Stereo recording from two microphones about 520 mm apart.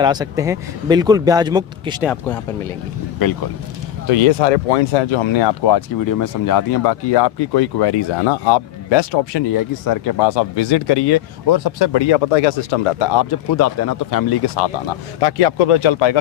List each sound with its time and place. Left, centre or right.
0.0 s speech: centre
4.0 s speech: left
9.8 s speech: left
13.0 s speech: left
13.5 s speech: left
15.2 s speech: left